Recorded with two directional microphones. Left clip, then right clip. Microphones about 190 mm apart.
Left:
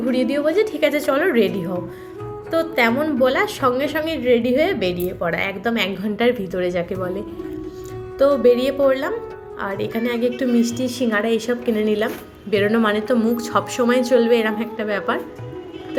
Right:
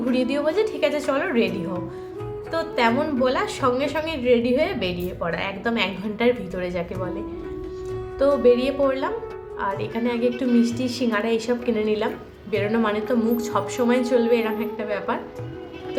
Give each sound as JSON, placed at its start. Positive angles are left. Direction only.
{"t": 0.1, "sound": "a woman's voice", "side_deg": 20}
{"t": 2.5, "sound": "a woman's voice", "side_deg": 25}
{"t": 8.4, "sound": "a woman's voice", "side_deg": 20}